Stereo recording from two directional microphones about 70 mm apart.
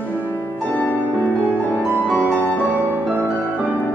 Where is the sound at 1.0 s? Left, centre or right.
Right.